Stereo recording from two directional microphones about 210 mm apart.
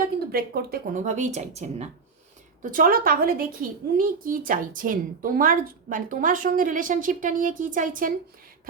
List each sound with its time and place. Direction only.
0.3 s a woman's voice: 45° right (ahead or behind)